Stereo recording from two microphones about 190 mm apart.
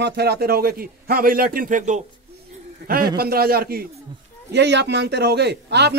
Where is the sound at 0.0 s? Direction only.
60° right (ahead or behind); by 2.0 s 40° right (ahead or behind).